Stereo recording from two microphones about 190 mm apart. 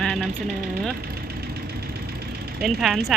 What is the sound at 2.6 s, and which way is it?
Speech, centre (ahead or behind).